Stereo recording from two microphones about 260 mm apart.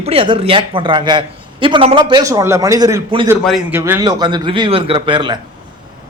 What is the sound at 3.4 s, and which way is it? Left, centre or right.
Speech, centre.